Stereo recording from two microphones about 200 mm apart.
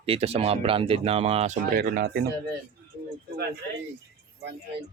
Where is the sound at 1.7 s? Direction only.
50° right (ahead or behind).